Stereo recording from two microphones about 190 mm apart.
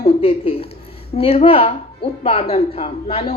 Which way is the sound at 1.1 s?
30° left (ahead or behind).